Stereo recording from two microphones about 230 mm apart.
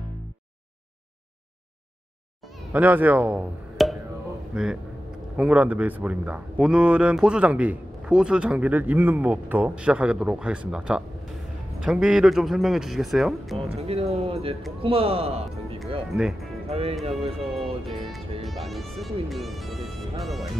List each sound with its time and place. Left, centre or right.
2.7 s a man's voice: centre
13.7 s speech: right
16.1 s a man's voice: centre
16.6 s speech: right
18.4 s a man's voice: centre